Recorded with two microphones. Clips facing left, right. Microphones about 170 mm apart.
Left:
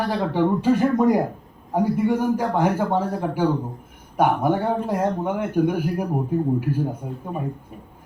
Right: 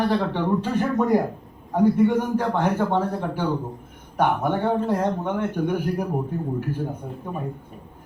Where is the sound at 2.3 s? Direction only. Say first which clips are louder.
Left 1 dB; 10° left (ahead or behind).